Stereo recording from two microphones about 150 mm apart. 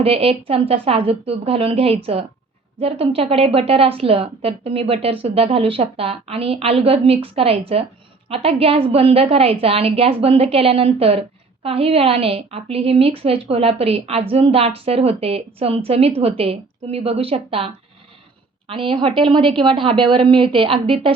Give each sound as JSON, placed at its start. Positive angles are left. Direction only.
{"t": 0.0, "sound": "a woman's voice", "side_deg": -40}
{"t": 18.7, "sound": "a woman's voice", "side_deg": -35}